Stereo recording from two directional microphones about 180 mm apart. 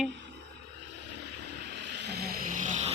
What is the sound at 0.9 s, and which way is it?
Vehicle, 70° right (ahead or behind).